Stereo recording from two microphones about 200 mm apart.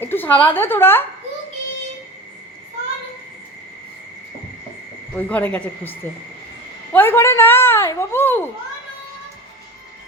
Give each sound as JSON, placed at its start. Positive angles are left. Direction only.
{"t": 0.0, "sound": "a woman's voice", "side_deg": 10}
{"t": 5.1, "sound": "speech", "side_deg": 5}